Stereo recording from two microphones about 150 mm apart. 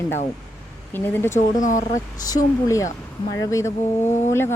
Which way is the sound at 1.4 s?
55° left (ahead or behind).